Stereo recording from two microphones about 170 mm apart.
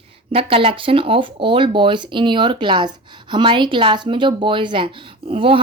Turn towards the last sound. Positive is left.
turn(degrees=-30)  # may be behind; listen again after turning